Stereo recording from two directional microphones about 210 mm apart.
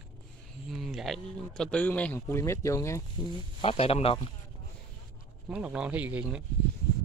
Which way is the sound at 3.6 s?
25° left (ahead or behind).